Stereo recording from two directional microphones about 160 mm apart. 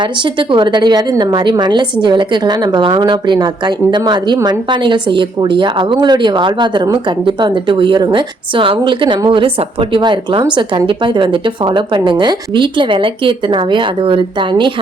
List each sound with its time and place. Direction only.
0.0 s a woman's voice: 30° right (ahead or behind)